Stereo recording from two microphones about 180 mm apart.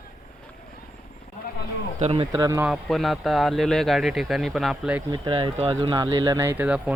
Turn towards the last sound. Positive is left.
turn(degrees=-5)  # may be behind; listen again after turning